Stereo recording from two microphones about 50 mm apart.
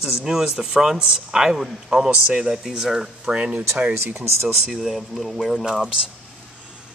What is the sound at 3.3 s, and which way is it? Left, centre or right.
Speech, right.